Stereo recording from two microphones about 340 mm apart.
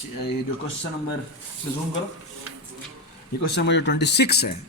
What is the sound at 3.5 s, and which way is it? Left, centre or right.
Speech, left.